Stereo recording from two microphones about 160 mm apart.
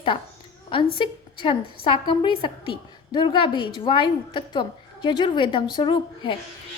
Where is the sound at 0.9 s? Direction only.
30° left (ahead or behind).